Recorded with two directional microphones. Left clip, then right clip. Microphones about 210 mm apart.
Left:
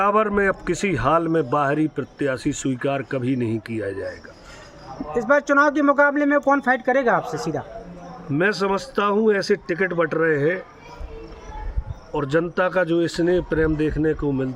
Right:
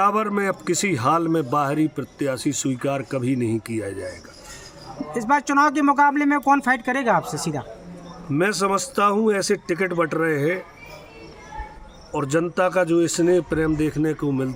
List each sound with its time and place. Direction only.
0.0 s a man's voice: 5° left (ahead or behind)
5.2 s speech: 50° right (ahead or behind)
8.3 s a man's voice: centre (ahead or behind)
12.1 s a man's voice: 5° left (ahead or behind)